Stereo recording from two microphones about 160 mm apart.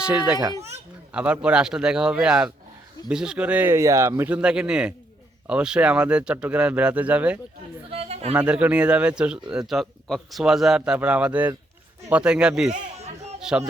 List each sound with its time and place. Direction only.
0.0 s a man's voice: 10° right (ahead or behind)
7.9 s a sound: 40° right (ahead or behind)
8.3 s a man's voice: 10° right (ahead or behind)